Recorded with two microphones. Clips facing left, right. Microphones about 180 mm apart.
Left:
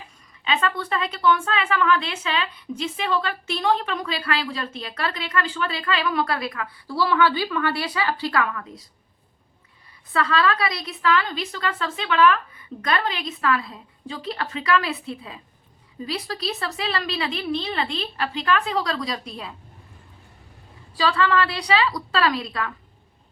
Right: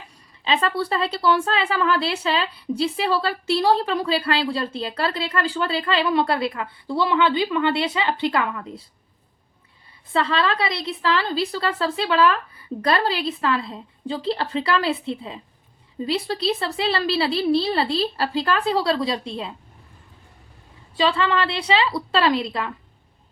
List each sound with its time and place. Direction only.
0.4 s speech: 30° right (ahead or behind)
10.1 s speech: 25° right (ahead or behind)
20.9 s a woman's voice: 25° right (ahead or behind)